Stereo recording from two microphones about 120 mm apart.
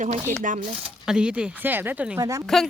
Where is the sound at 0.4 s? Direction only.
90° right.